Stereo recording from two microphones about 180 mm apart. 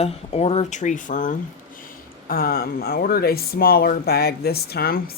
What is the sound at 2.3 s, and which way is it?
Speech, 55° left (ahead or behind).